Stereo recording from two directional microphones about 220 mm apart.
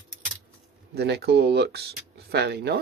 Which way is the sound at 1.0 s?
50° right (ahead or behind).